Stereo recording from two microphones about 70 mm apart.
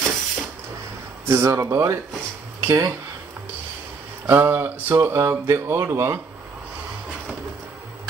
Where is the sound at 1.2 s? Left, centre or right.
Right.